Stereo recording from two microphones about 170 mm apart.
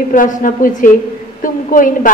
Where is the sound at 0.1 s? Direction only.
50° left (ahead or behind).